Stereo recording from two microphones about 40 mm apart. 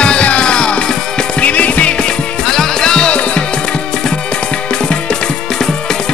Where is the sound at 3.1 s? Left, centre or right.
Left.